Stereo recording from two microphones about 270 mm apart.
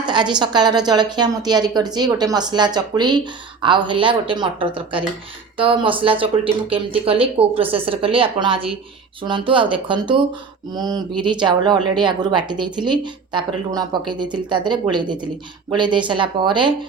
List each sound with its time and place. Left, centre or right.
0.0 s a woman's voice: centre